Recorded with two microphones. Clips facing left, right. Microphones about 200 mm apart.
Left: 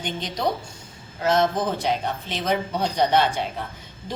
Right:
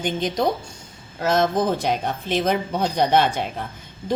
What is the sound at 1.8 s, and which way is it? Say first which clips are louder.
Speech: right 2 dB; 50° right (ahead or behind).